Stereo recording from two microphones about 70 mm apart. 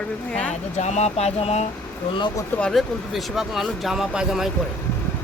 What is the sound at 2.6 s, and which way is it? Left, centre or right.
Speech, centre.